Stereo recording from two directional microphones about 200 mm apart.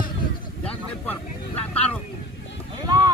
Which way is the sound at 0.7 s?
10° left (ahead or behind).